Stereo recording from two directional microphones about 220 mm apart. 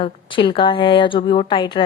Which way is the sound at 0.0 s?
20° left (ahead or behind).